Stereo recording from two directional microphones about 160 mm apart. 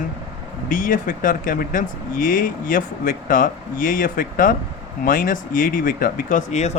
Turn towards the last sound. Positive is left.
turn(degrees=45)  # may be behind; listen again after turning